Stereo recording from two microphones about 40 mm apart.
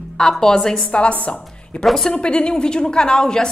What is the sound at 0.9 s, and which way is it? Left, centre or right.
A woman's voice, left.